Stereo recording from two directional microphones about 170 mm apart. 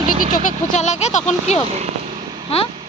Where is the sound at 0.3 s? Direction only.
45° left (ahead or behind).